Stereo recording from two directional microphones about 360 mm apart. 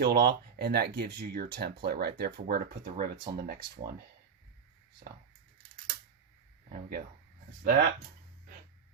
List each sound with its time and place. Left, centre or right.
0.0 s speech: right
6.7 s speech: centre